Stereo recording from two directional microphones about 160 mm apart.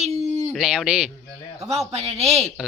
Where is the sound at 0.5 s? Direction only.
Centre (ahead or behind).